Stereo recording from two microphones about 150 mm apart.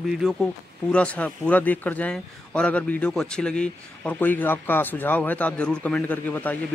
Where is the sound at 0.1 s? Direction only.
Centre (ahead or behind).